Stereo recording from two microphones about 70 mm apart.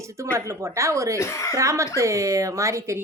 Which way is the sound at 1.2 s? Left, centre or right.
Left.